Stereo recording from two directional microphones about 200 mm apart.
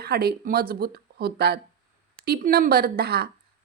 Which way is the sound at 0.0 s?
50° right (ahead or behind).